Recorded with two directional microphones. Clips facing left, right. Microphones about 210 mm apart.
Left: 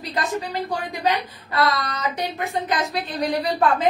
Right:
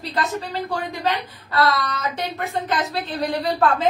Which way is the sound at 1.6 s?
15° left (ahead or behind).